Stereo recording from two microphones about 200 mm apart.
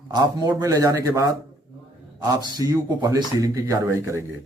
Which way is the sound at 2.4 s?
20° right (ahead or behind).